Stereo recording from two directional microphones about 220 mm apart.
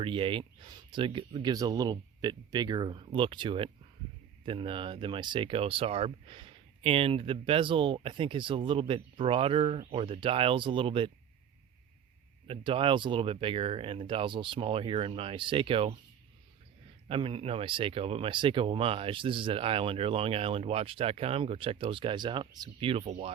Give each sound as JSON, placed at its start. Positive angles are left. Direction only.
{"t": 0.0, "sound": "speech", "side_deg": -25}
{"t": 12.5, "sound": "speech", "side_deg": -25}
{"t": 17.1, "sound": "speech", "side_deg": -25}